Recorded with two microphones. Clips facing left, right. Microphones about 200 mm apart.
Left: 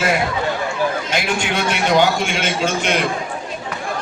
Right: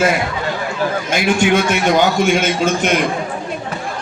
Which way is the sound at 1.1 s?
50° right (ahead or behind).